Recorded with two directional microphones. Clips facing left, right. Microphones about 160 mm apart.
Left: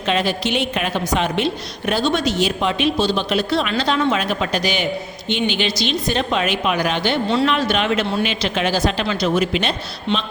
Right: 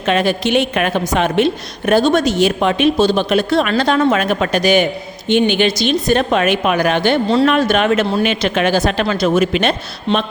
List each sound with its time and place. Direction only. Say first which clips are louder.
0.0 s a woman's voice: right 4 dB; 55° right (ahead or behind)